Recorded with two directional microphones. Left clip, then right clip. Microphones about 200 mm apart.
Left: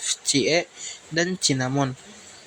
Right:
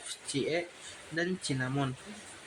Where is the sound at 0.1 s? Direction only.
30° left (ahead or behind).